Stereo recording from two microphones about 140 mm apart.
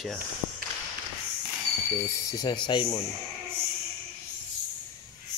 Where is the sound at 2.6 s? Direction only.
35° left (ahead or behind).